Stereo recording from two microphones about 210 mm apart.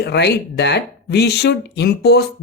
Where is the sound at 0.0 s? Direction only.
55° left (ahead or behind).